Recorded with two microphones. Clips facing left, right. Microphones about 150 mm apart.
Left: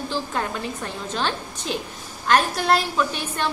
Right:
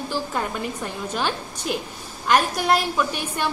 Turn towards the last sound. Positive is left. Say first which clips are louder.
# even
turn(degrees=-10)  # may be behind; listen again after turning